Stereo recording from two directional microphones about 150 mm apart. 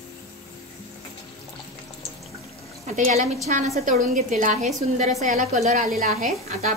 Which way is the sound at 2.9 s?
55° right (ahead or behind).